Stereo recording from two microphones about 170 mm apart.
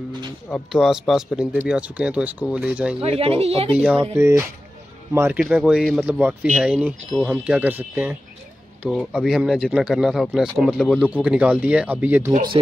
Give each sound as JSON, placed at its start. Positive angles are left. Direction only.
{"t": 0.5, "sound": "speech", "side_deg": 0}
{"t": 3.0, "sound": "speech", "side_deg": -35}
{"t": 4.1, "sound": "speech", "side_deg": -15}
{"t": 5.4, "sound": "speech", "side_deg": 0}